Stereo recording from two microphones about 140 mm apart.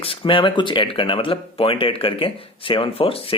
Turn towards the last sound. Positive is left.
turn(degrees=40)  # may be behind; listen again after turning